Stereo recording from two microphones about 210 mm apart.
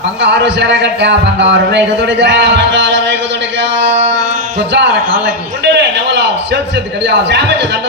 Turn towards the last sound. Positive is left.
turn(degrees=-55)  # may be behind; listen again after turning